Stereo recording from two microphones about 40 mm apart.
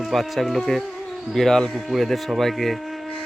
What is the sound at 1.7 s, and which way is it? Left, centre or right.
Speech, centre.